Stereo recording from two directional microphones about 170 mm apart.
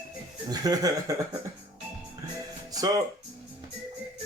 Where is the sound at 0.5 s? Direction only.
20° right (ahead or behind).